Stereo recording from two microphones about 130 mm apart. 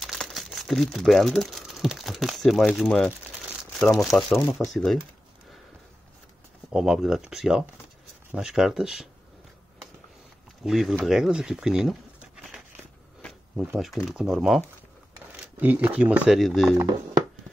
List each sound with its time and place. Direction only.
0.0 s speech: centre (ahead or behind)
6.7 s speech: 5° right (ahead or behind)
10.6 s speech: centre (ahead or behind)
12.4 s crackle: 5° right (ahead or behind)
13.7 s speech: centre (ahead or behind)
15.6 s speech: 10° right (ahead or behind)
16.7 s speech: 30° right (ahead or behind)